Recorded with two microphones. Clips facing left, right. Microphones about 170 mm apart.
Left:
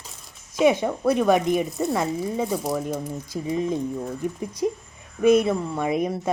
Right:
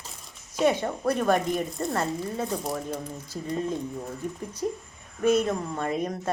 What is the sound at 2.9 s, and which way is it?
Speech, 10° left (ahead or behind).